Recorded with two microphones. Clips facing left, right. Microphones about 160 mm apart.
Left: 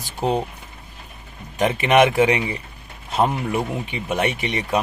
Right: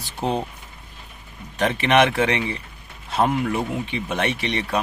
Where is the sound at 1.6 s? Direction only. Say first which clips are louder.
Left 2 dB; 10° left (ahead or behind).